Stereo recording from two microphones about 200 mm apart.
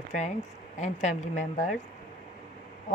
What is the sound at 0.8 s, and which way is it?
Speech, 35° left (ahead or behind).